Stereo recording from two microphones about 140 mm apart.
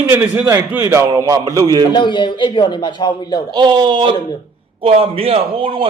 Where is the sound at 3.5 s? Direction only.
35° right (ahead or behind).